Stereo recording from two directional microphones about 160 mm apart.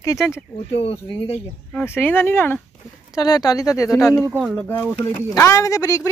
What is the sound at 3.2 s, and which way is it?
Speech, 25° left (ahead or behind).